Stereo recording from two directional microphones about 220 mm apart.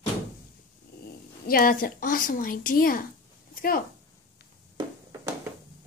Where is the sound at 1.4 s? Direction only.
40° left (ahead or behind).